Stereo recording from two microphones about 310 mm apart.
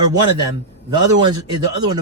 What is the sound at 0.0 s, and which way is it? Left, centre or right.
Speech, centre.